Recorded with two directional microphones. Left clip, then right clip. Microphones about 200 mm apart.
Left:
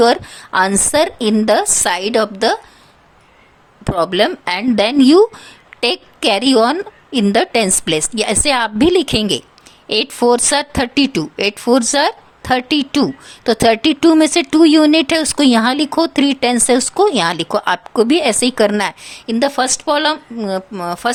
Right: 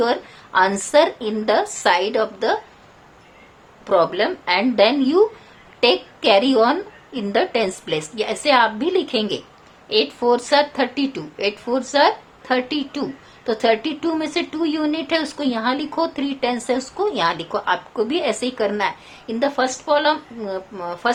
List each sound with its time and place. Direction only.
0.0 s speech: 55° left (ahead or behind)
3.9 s speech: 60° left (ahead or behind)